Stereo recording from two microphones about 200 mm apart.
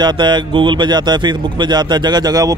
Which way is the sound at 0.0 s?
20° right (ahead or behind).